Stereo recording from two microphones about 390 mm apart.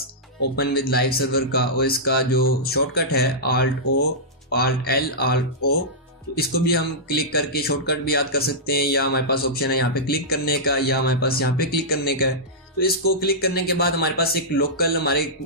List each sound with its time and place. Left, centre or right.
0.6 s speech: left